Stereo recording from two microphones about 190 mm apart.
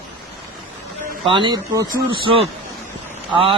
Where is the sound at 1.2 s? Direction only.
25° right (ahead or behind).